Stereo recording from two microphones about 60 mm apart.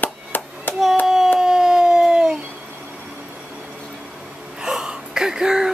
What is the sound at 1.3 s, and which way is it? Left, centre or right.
Howl, centre.